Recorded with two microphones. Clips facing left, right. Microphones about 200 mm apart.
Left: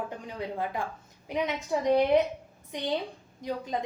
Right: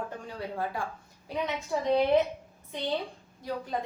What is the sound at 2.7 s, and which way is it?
A woman's voice, 15° left (ahead or behind).